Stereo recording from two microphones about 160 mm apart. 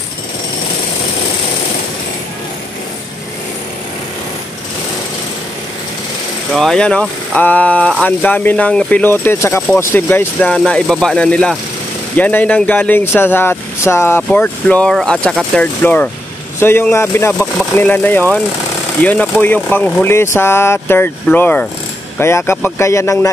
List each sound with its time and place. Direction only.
6.5 s speech: centre (ahead or behind); by 23.3 s 20° left (ahead or behind)